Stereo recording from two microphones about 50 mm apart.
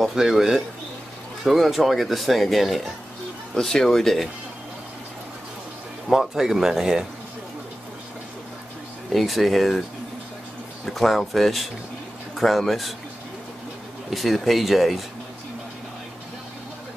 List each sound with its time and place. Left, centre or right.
0.0 s speech: centre
6.0 s speech: centre
9.1 s speech: centre
10.9 s speech: centre
14.1 s speech: centre